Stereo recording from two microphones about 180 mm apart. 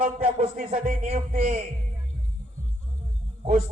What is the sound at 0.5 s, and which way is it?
Music, 50° right (ahead or behind).